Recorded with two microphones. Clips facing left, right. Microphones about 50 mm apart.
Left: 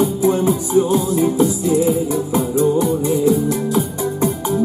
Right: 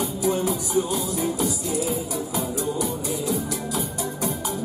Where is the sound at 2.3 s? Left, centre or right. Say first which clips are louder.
Left 11 dB; left.